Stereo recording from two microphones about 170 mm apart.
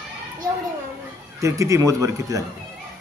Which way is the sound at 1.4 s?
20° right (ahead or behind).